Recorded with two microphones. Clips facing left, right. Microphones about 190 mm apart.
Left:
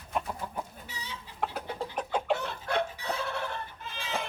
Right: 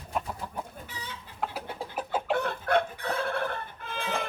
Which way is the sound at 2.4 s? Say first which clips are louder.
Right 5 dB; 55° right (ahead or behind).